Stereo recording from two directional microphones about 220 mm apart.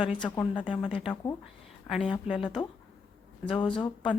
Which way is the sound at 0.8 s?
Centre (ahead or behind).